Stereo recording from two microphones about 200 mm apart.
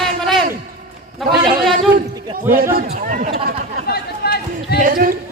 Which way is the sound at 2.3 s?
45° right (ahead or behind).